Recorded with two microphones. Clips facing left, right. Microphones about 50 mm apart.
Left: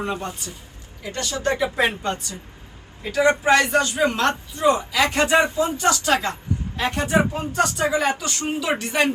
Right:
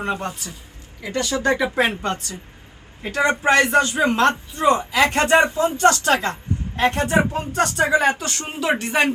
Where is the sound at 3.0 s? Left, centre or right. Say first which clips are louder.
Left 1 dB; right.